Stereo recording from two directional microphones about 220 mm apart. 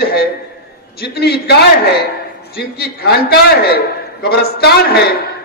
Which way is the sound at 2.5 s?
45° left (ahead or behind).